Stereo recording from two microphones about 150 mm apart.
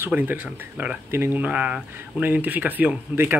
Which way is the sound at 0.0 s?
10° right (ahead or behind).